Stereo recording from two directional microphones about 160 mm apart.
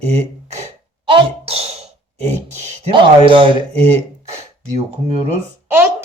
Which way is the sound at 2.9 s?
30° right (ahead or behind).